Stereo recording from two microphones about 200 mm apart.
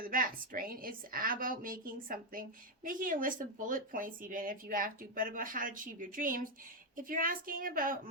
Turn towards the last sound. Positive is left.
turn(degrees=-45)  # may be behind; listen again after turning